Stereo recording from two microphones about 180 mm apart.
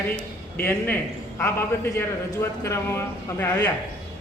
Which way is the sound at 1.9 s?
15° left (ahead or behind).